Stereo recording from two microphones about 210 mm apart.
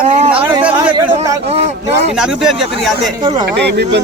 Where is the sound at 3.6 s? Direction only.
55° right (ahead or behind).